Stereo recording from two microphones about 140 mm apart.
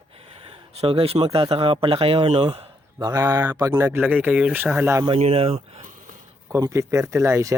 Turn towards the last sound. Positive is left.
turn(degrees=-20)  # may be behind; listen again after turning